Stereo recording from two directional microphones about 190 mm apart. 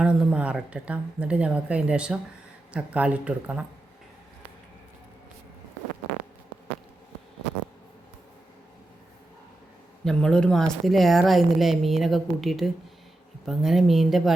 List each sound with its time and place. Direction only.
0.0 s speech: 5° right (ahead or behind)
10.0 s speech: 5° left (ahead or behind)